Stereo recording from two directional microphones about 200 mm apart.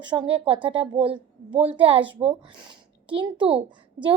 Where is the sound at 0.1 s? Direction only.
25° right (ahead or behind).